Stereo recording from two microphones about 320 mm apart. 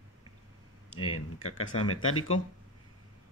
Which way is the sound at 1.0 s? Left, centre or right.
Left.